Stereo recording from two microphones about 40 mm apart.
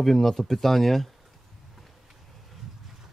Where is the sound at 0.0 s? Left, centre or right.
Centre.